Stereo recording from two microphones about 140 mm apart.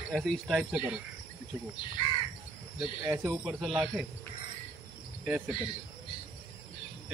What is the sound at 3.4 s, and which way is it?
Speech, 5° right (ahead or behind).